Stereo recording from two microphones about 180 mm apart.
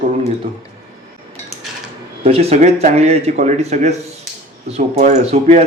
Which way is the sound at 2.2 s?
35° right (ahead or behind).